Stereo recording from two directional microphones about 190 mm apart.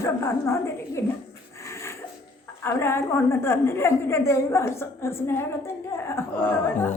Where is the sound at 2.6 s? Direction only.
10° left (ahead or behind).